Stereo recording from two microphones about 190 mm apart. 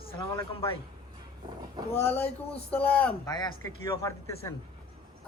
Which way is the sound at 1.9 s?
10° left (ahead or behind).